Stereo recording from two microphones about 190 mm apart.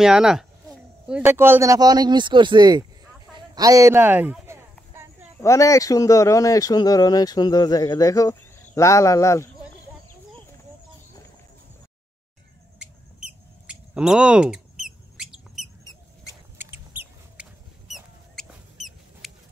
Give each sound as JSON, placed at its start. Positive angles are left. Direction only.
{"t": 0.0, "sound": "a man's voice", "side_deg": -5}
{"t": 5.4, "sound": "speech", "side_deg": 15}
{"t": 12.7, "sound": "a sound", "side_deg": -5}
{"t": 16.5, "sound": "chicken", "side_deg": -10}